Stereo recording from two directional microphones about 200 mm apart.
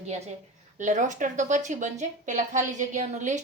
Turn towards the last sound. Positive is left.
turn(degrees=-35)  # may be behind; listen again after turning